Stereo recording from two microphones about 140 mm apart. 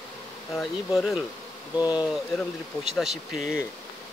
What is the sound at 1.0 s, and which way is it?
Speech, 5° right (ahead or behind).